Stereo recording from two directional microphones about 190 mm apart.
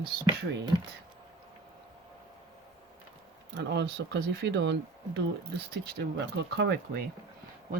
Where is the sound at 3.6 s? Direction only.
65° right (ahead or behind).